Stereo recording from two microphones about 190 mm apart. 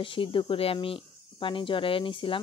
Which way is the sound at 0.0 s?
25° left (ahead or behind).